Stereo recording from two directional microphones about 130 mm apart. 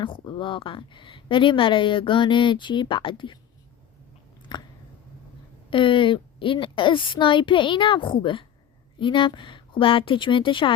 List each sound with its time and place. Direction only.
0.0 s speech: 40° left (ahead or behind)
4.5 s a sound: 35° left (ahead or behind)
5.7 s speech: 40° left (ahead or behind)